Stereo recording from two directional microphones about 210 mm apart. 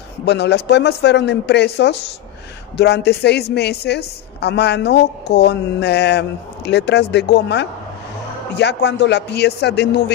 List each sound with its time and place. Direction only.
0.2 s a woman's voice: 55° left (ahead or behind)